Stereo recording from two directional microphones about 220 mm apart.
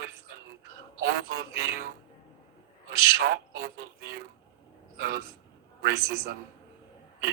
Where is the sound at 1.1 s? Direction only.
45° right (ahead or behind).